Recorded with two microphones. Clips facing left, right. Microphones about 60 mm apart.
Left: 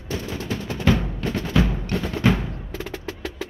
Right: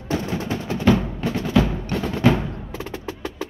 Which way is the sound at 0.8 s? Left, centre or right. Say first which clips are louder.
Right 3 dB; centre.